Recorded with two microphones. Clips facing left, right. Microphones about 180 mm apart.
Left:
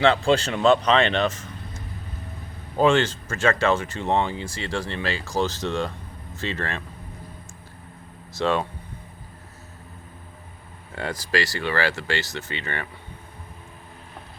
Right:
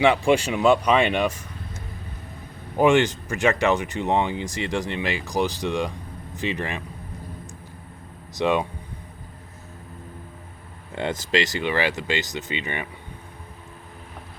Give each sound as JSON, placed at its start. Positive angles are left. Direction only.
{"t": 0.0, "sound": "speech", "side_deg": -15}
{"t": 2.7, "sound": "speech", "side_deg": -15}
{"t": 8.3, "sound": "speech", "side_deg": -15}
{"t": 10.9, "sound": "speech", "side_deg": -20}